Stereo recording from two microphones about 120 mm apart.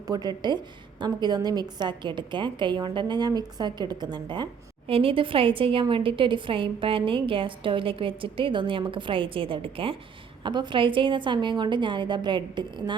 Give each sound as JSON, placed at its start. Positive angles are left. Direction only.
{"t": 0.1, "sound": "a woman's voice", "side_deg": -35}
{"t": 4.9, "sound": "a woman's voice", "side_deg": -50}